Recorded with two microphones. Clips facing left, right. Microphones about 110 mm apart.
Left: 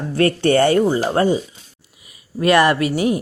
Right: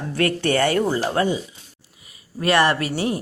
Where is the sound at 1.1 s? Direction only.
35° left (ahead or behind).